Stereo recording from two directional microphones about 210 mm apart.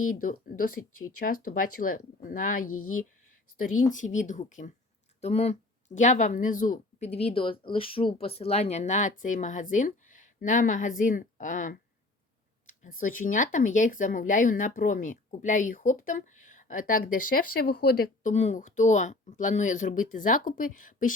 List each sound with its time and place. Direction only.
0.0 s speech: 40° left (ahead or behind)
0.8 s speech: 90° left
1.5 s speech: 40° left (ahead or behind)
2.6 s speech: 90° left
3.6 s speech: 40° left (ahead or behind)